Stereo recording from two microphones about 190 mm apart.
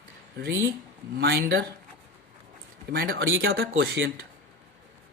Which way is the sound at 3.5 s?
75° right (ahead or behind).